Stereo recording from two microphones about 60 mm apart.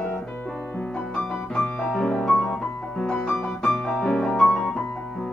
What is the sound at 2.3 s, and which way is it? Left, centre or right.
Music, left.